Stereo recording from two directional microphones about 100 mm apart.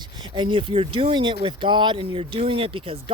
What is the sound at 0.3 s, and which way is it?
Speech, 55° right (ahead or behind).